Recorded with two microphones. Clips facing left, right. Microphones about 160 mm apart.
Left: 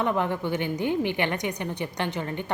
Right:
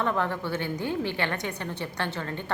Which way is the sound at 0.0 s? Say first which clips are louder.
Left 2 dB; 15° left (ahead or behind).